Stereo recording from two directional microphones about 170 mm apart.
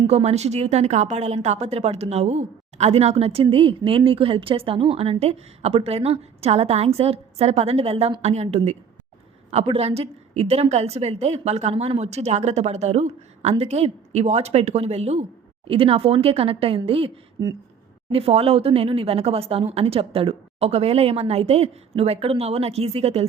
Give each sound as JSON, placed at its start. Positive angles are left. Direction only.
{"t": 0.1, "sound": "a woman's voice", "side_deg": -40}